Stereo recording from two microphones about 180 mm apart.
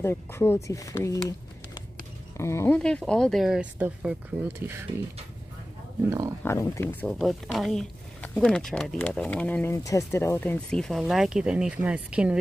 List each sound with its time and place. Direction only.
0.0 s speech: 15° left (ahead or behind)
2.3 s speech: 15° left (ahead or behind)
2.8 s speech: 5° left (ahead or behind); by 4.8 s 15° right (ahead or behind)
6.0 s speech: 15° right (ahead or behind)
6.4 s speech: 15° left (ahead or behind); by 12.4 s 5° right (ahead or behind)